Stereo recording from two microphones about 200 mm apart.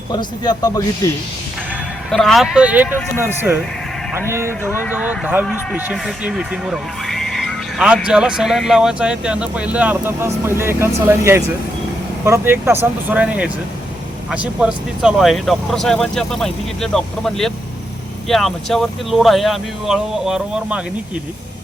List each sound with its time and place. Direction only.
0.1 s a man's voice: 20° left (ahead or behind)
2.0 s speech: centre (ahead or behind)
4.3 s speech: 10° right (ahead or behind)
4.6 s speech: 10° left (ahead or behind)
4.9 s speech: 5° right (ahead or behind)